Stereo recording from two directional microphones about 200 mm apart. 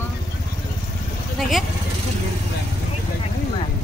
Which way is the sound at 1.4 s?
Centre (ahead or behind).